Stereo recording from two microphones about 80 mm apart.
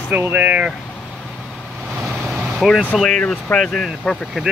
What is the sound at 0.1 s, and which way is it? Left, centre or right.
Speech, right.